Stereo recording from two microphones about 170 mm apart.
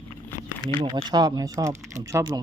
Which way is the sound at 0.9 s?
25° right (ahead or behind).